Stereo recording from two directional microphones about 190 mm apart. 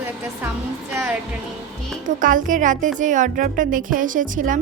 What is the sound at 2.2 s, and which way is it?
A woman's voice, 45° right (ahead or behind).